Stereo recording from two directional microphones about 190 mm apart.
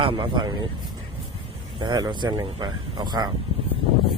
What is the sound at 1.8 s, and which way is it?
Speech, 20° right (ahead or behind).